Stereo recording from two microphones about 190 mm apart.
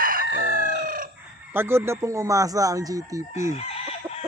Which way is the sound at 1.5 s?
10° right (ahead or behind).